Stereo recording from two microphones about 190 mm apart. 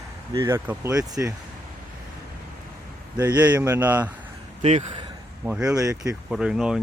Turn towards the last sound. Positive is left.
turn(degrees=-5)  # may be behind; listen again after turning